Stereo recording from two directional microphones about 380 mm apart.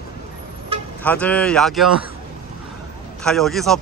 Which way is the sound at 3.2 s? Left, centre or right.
Centre.